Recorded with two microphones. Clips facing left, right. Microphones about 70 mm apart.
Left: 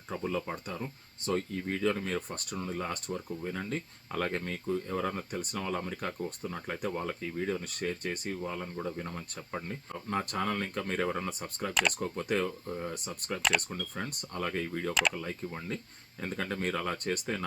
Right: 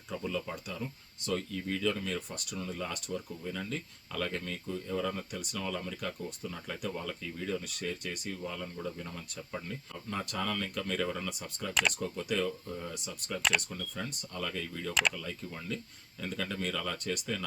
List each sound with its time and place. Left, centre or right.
0.1 s speech: left
11.7 s speech: centre
11.9 s speech: left